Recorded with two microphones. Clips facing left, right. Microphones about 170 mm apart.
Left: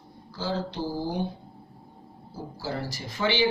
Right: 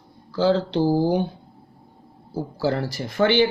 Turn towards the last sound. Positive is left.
turn(degrees=-55)  # may be behind; listen again after turning